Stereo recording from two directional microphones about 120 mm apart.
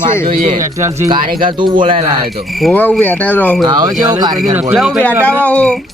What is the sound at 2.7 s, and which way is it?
Speech, 15° left (ahead or behind).